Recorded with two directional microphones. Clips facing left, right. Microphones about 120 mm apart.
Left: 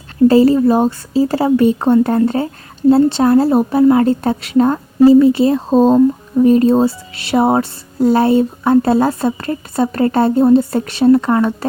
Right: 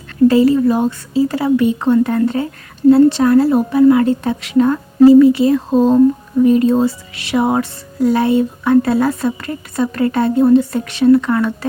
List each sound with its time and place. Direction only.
0.3 s speech: 35° left (ahead or behind)